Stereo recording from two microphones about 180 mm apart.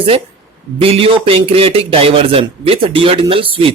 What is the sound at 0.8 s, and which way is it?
A man's voice, 30° right (ahead or behind).